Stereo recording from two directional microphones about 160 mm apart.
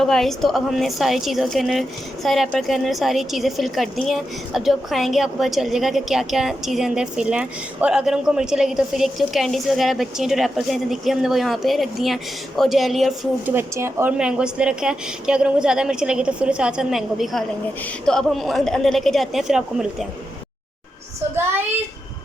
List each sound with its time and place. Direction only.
0.0 s a woman's voice: centre (ahead or behind)
13.4 s a woman's voice: 15° right (ahead or behind)